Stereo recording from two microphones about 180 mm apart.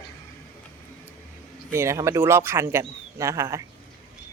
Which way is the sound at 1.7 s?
15° right (ahead or behind).